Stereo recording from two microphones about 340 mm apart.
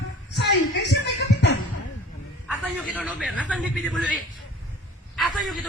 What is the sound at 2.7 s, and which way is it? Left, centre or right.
A man's voice, centre.